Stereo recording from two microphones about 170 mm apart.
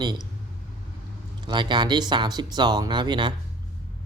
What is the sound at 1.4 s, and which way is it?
Speech, 25° right (ahead or behind).